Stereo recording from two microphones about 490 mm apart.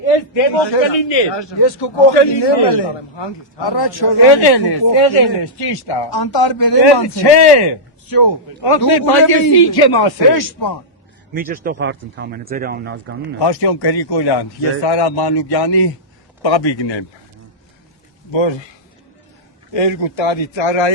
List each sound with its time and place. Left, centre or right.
0.0 s a man's voice: left
11.3 s speech: centre
13.4 s a man's voice: left
18.3 s speech: left
19.7 s speech: left